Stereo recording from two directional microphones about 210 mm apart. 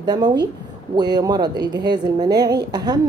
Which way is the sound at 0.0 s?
20° right (ahead or behind).